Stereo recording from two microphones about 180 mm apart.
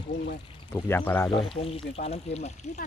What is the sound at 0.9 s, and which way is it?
Speech, 10° left (ahead or behind).